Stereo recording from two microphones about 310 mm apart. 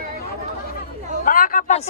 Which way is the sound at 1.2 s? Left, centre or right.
Left.